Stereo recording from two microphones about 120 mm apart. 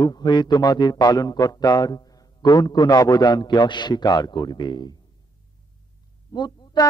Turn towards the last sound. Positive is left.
turn(degrees=35)  # may be behind; listen again after turning